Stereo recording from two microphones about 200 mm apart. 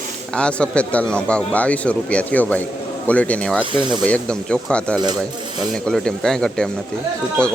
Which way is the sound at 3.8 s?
20° right (ahead or behind).